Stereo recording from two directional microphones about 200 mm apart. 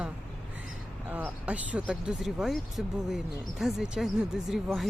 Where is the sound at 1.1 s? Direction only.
5° right (ahead or behind).